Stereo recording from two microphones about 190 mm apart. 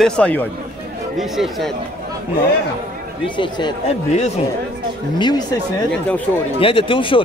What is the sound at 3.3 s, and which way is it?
Speech, 25° left (ahead or behind).